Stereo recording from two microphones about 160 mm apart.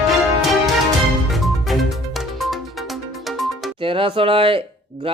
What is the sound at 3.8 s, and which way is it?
Speech, 35° right (ahead or behind).